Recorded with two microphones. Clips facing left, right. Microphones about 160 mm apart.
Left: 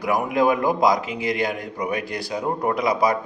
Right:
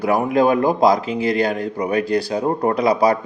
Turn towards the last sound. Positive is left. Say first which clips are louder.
# right 4 dB
turn(degrees=-30)  # may be behind; listen again after turning